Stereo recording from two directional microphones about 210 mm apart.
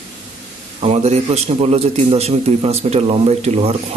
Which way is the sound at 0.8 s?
30° right (ahead or behind).